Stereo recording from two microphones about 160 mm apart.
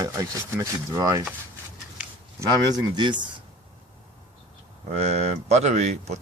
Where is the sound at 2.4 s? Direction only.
25° right (ahead or behind).